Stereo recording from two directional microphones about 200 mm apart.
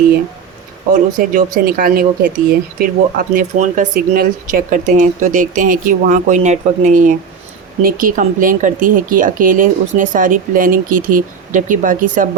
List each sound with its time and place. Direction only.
1.2 s speech: 45° right (ahead or behind)